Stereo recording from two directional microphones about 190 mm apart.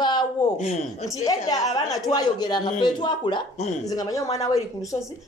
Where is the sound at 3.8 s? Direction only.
20° left (ahead or behind).